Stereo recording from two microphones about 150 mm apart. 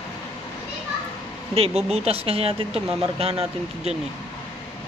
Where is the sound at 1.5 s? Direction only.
40° right (ahead or behind).